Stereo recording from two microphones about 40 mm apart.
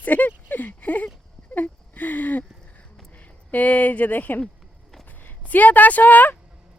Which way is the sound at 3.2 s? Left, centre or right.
Left.